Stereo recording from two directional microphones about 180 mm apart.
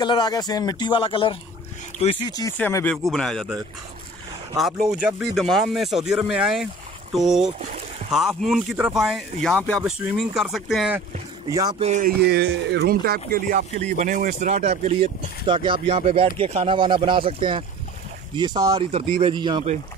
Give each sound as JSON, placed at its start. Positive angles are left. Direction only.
{"t": 0.0, "sound": "speech", "side_deg": 25}
{"t": 2.5, "sound": "speech", "side_deg": 10}
{"t": 4.6, "sound": "speech", "side_deg": 0}
{"t": 11.8, "sound": "speech", "side_deg": -40}
{"t": 12.2, "sound": "speech", "side_deg": -65}
{"t": 18.8, "sound": "speech", "side_deg": -35}